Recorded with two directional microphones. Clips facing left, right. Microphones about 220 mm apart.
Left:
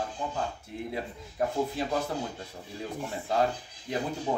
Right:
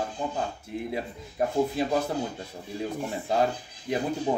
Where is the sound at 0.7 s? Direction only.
10° right (ahead or behind).